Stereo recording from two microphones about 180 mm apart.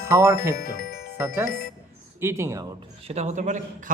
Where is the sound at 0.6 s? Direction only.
50° left (ahead or behind).